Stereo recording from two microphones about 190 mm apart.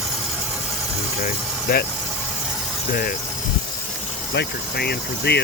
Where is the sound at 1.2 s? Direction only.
55° left (ahead or behind).